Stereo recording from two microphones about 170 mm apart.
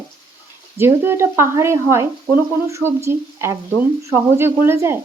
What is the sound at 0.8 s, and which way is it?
Speech, 15° right (ahead or behind).